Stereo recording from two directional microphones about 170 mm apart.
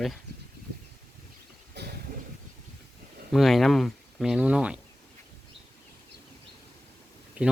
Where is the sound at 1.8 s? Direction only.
80° right.